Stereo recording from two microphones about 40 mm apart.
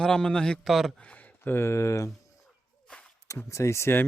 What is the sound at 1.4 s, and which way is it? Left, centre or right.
Speech, left.